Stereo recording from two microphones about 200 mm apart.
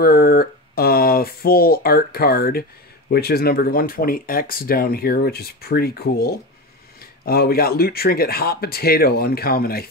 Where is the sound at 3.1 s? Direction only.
50° left (ahead or behind).